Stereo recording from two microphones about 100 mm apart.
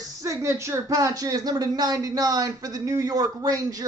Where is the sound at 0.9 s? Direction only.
40° right (ahead or behind).